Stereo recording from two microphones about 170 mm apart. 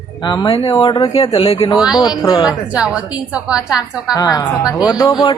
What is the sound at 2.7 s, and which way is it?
A woman's voice, 5° right (ahead or behind).